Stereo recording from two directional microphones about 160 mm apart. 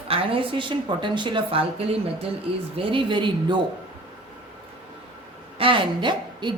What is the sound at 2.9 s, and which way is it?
Speech, 30° right (ahead or behind).